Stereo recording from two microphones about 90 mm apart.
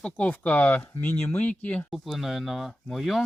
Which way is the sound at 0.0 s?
15° left (ahead or behind).